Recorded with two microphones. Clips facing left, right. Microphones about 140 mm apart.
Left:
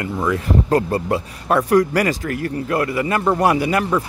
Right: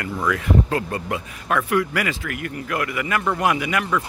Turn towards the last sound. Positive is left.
turn(degrees=30)  # may be behind; listen again after turning